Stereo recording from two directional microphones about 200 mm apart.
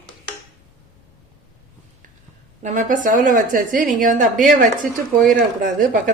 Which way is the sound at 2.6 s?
40° right (ahead or behind).